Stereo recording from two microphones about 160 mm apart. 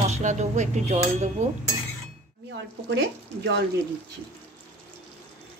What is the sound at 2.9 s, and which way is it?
Speech, 90° right.